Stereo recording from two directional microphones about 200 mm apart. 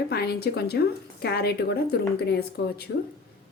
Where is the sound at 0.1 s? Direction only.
50° left (ahead or behind).